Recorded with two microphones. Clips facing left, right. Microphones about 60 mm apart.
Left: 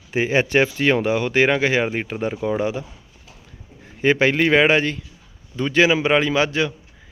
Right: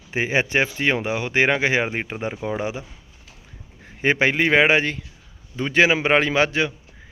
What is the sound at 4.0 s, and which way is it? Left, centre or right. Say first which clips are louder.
A man's voice: left 2 dB; right.